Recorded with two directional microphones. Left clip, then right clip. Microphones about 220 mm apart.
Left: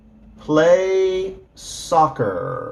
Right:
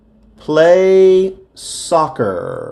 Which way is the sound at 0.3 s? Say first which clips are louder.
Right 5 dB; 45° right (ahead or behind).